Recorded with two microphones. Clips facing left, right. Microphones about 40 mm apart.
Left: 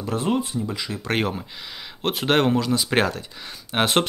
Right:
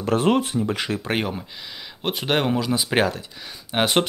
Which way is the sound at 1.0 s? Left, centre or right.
Centre.